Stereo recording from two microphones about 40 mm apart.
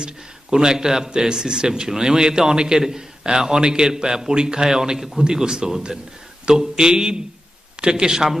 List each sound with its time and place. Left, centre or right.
0.5 s a man's voice: centre